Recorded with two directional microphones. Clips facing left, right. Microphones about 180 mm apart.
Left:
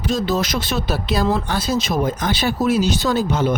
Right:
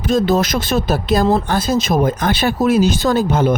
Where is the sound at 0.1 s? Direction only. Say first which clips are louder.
Right 6 dB; 55° right (ahead or behind).